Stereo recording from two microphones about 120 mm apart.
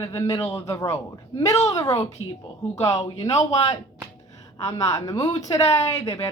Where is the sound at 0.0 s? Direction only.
25° left (ahead or behind).